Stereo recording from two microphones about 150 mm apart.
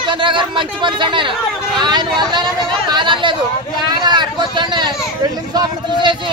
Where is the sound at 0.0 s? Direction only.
35° right (ahead or behind).